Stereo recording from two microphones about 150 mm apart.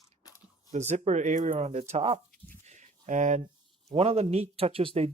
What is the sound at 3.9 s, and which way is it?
Speech, 40° right (ahead or behind).